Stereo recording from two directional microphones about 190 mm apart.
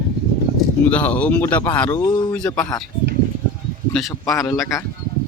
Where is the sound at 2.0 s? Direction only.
25° left (ahead or behind).